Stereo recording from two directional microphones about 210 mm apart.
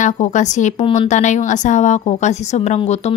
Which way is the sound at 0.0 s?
35° left (ahead or behind).